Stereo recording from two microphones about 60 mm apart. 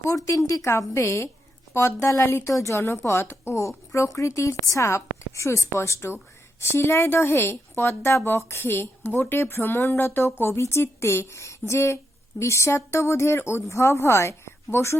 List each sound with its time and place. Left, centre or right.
0.0 s a woman's voice: left